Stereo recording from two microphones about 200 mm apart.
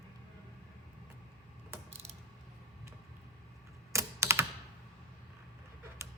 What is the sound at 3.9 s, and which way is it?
Computer keyboard, 15° right (ahead or behind).